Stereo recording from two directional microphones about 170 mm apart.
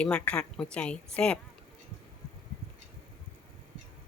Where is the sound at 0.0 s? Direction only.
5° left (ahead or behind).